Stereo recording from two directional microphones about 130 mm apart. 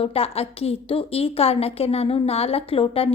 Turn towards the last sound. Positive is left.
turn(degrees=45)  # may be behind; listen again after turning